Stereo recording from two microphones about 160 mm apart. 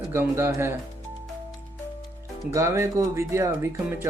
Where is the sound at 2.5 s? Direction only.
20° right (ahead or behind).